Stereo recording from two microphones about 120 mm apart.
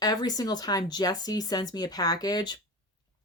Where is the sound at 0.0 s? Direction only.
35° left (ahead or behind).